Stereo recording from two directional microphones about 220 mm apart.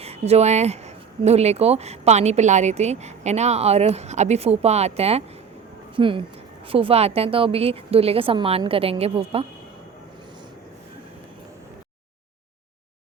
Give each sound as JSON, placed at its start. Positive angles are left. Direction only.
{"t": 0.0, "sound": "speech", "side_deg": -30}